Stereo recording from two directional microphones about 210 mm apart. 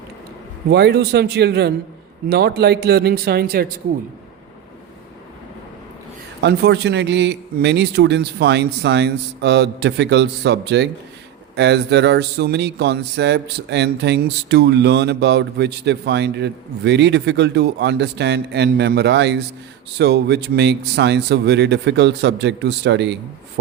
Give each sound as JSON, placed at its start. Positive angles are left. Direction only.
{"t": 0.7, "sound": "speech", "side_deg": -50}
{"t": 6.4, "sound": "speech", "side_deg": -50}